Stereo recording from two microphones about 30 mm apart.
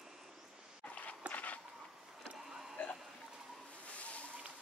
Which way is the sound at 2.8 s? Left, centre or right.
Left.